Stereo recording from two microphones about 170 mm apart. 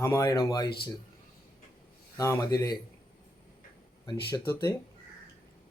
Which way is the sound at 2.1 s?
20° left (ahead or behind).